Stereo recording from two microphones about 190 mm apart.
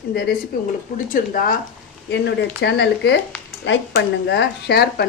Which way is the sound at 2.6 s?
60° left (ahead or behind).